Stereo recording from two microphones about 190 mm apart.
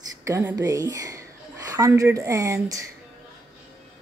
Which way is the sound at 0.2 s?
15° right (ahead or behind).